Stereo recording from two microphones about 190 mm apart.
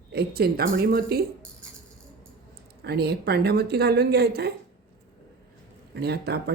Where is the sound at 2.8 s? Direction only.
60° right (ahead or behind).